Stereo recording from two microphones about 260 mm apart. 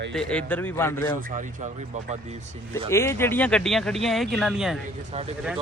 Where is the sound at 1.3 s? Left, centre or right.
Right.